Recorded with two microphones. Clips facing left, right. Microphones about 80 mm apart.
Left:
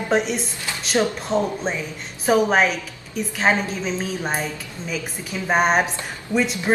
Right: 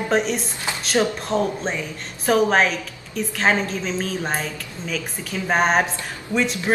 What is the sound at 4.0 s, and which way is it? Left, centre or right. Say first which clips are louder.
A man's voice: even; centre.